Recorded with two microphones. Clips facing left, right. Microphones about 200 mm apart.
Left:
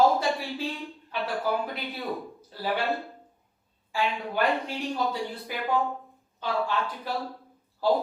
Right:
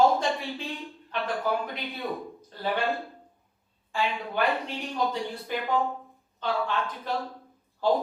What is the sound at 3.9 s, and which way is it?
A woman's voice, centre (ahead or behind).